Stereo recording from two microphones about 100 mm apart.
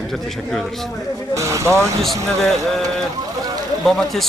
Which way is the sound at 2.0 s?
5° left (ahead or behind).